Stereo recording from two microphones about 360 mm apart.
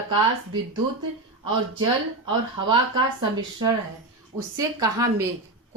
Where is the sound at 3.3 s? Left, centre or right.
Centre.